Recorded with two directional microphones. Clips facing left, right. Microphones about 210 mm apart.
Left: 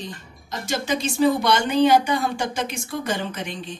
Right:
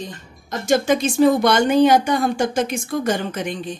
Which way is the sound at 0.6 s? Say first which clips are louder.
Right 7 dB; 50° right (ahead or behind).